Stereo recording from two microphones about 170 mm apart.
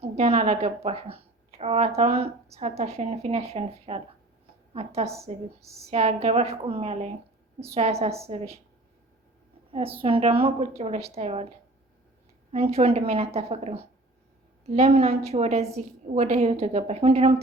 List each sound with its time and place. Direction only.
0.0 s a woman's voice: 35° right (ahead or behind)
10.0 s speech: 35° right (ahead or behind)